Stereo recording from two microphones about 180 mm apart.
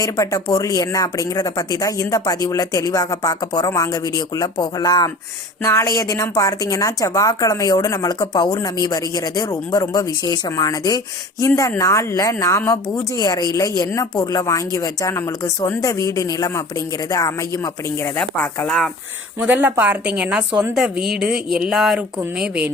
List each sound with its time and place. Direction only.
0.0 s speech: 20° left (ahead or behind)
19.4 s a woman's voice: 10° right (ahead or behind)